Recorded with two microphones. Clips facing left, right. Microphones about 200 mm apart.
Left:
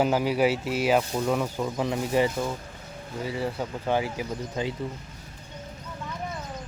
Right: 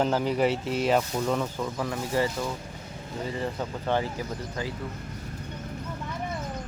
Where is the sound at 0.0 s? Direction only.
10° left (ahead or behind).